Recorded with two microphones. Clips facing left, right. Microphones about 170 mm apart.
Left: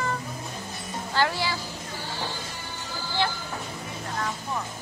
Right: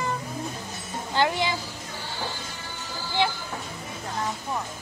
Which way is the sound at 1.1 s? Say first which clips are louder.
Right 2 dB; 20° right (ahead or behind).